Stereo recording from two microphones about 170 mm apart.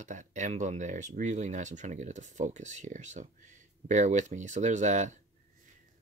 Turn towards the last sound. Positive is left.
turn(degrees=-45)  # may be behind; listen again after turning